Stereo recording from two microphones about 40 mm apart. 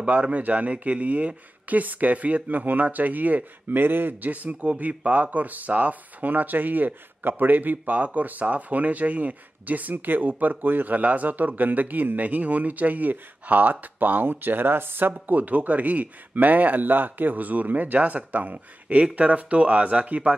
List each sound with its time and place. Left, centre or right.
0.0 s speech: right
3.7 s speech: right
4.3 s speech: right
11.0 s speech: right
15.2 s speech: right